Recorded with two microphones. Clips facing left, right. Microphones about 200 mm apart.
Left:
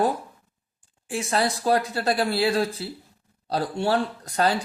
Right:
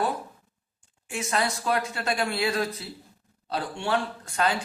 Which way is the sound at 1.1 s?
30° left (ahead or behind).